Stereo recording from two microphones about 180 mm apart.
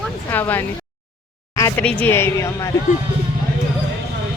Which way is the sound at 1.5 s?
20° left (ahead or behind).